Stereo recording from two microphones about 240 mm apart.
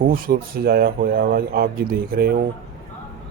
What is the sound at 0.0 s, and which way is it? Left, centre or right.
Speech, right.